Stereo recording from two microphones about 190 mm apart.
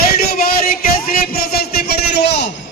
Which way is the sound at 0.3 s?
50° left (ahead or behind).